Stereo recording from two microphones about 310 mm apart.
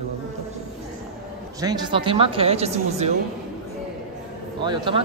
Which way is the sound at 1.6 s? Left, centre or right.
Centre.